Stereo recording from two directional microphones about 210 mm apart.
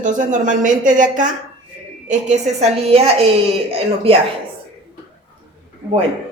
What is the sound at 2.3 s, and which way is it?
A woman's voice, 30° right (ahead or behind).